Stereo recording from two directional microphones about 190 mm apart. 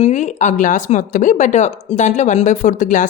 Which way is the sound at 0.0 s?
40° left (ahead or behind).